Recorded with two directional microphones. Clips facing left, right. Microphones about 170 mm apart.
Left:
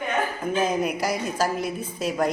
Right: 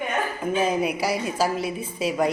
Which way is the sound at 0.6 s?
5° right (ahead or behind).